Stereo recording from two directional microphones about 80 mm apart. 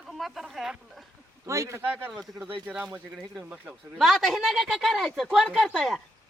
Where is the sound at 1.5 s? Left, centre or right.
Right.